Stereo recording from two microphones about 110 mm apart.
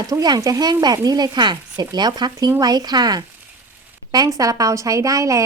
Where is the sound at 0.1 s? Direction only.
35° right (ahead or behind).